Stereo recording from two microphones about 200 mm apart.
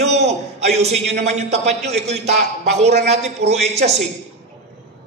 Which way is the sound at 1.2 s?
35° right (ahead or behind).